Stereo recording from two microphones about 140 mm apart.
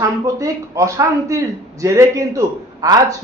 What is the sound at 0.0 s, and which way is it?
Speech, 25° right (ahead or behind).